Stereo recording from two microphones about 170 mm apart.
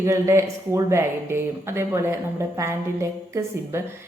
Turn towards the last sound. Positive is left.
turn(degrees=-15)  # may be behind; listen again after turning